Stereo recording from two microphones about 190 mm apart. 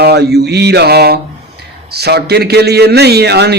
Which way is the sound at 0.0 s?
60° right (ahead or behind).